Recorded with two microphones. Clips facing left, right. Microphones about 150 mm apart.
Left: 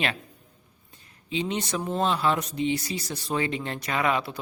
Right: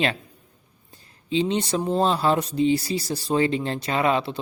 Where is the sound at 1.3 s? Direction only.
30° right (ahead or behind).